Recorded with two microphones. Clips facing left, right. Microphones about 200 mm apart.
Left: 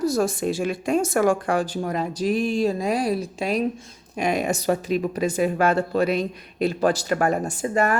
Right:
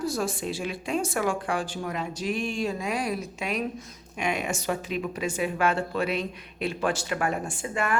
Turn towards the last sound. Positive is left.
turn(degrees=40)  # may be behind; listen again after turning